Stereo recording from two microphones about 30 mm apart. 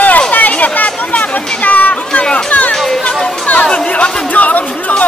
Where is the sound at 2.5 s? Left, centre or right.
Left.